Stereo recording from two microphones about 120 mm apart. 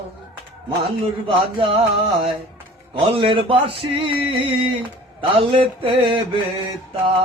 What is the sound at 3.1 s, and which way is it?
Music, 45° right (ahead or behind).